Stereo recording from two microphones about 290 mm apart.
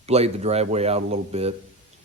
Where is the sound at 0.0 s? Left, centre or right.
Right.